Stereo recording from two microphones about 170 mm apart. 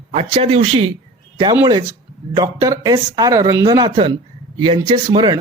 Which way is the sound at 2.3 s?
20° right (ahead or behind).